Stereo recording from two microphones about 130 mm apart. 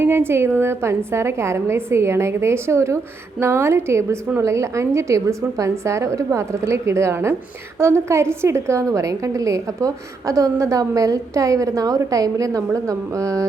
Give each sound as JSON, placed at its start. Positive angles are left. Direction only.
{"t": 0.0, "sound": "a woman's voice", "side_deg": -20}